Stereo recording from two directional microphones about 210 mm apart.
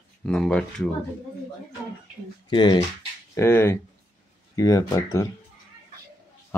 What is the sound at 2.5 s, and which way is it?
Speech, 20° left (ahead or behind).